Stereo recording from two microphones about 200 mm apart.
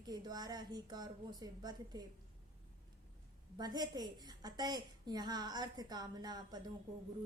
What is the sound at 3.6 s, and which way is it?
Speech, 20° right (ahead or behind).